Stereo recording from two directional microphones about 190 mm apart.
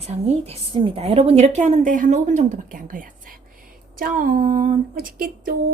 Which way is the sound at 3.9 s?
45° right (ahead or behind).